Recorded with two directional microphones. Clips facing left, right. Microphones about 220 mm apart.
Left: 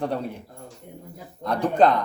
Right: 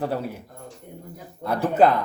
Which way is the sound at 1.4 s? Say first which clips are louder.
Right 1 dB; 5° right (ahead or behind).